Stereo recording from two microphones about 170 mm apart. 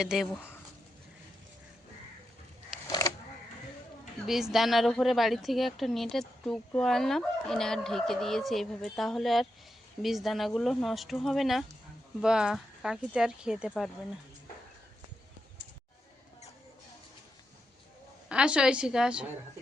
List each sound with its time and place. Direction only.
0.0 s a woman's voice: centre (ahead or behind)
2.8 s a sound: 20° left (ahead or behind)
4.3 s a woman's voice: centre (ahead or behind)
18.3 s a woman's voice: 5° right (ahead or behind)